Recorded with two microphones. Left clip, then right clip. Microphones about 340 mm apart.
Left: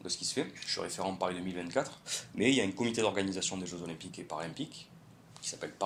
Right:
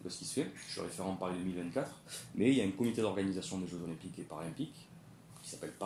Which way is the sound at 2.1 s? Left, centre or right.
Left.